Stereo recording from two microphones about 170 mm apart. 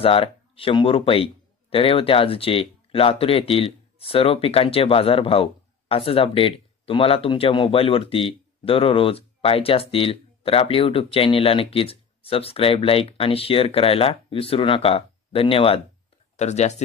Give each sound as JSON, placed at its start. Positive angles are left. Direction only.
{"t": 0.0, "sound": "speech", "side_deg": 35}